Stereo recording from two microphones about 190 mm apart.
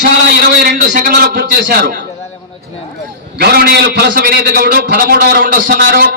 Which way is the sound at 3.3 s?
60° right (ahead or behind).